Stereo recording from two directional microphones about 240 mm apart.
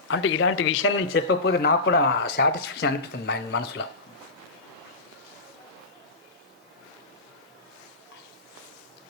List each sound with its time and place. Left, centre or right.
0.1 s speech: left